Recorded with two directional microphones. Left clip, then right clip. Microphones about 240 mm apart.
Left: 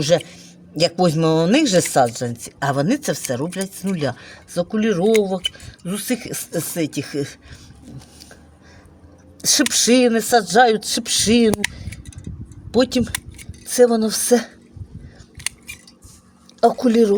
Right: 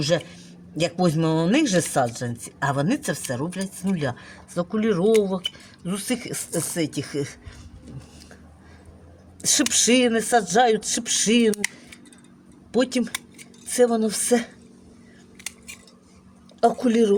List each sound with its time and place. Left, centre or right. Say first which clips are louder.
0.3 s speech: left 3 dB; left
9.4 s speech: left 4 dB; centre
16.6 s speech: left 4 dB; centre